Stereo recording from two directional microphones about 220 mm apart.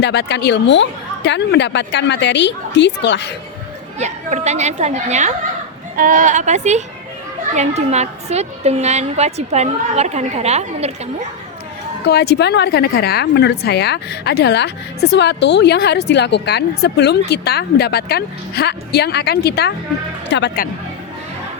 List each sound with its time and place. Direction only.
0.0 s a woman's voice: 50° left (ahead or behind)
3.9 s a woman's voice: 30° right (ahead or behind)
12.0 s a woman's voice: 50° left (ahead or behind)